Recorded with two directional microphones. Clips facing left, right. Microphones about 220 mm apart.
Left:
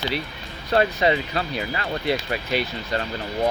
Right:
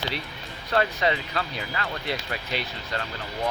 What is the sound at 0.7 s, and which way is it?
Speech, 15° left (ahead or behind).